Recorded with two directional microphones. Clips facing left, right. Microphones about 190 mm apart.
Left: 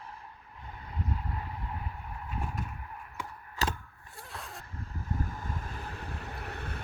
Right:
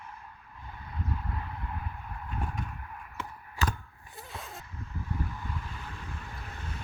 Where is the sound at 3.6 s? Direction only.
40° left (ahead or behind).